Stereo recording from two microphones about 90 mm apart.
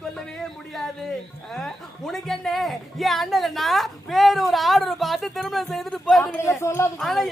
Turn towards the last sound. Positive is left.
turn(degrees=0)  # may be behind; listen again after turning